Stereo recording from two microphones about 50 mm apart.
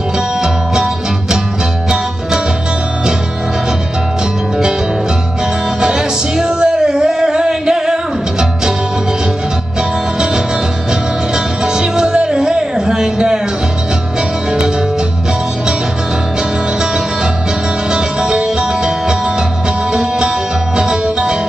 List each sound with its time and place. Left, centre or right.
5.8 s music: centre
11.3 s music: centre
17.9 s music: centre